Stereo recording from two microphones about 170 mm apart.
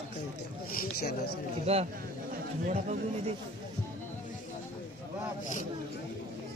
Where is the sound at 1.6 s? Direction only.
35° right (ahead or behind).